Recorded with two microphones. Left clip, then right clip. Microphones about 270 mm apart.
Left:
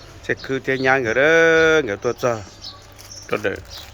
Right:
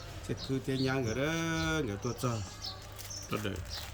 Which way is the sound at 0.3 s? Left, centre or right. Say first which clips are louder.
Left 15 dB; centre.